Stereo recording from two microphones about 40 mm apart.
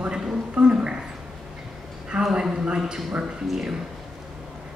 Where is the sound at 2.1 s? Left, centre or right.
Centre.